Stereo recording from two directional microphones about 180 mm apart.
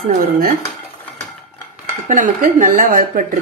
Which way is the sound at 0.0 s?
50° right (ahead or behind).